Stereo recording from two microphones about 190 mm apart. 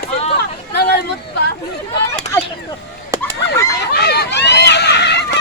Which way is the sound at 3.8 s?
60° left (ahead or behind).